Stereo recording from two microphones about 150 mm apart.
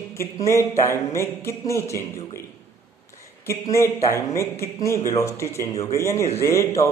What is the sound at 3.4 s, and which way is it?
Speech, 20° left (ahead or behind).